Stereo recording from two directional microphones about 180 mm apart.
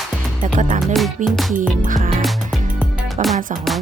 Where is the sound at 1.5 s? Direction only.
45° right (ahead or behind).